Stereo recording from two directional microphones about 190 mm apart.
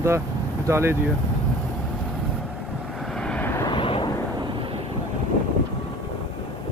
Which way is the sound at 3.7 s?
25° left (ahead or behind).